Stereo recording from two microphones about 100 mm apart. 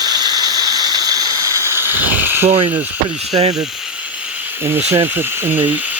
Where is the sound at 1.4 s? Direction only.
30° right (ahead or behind).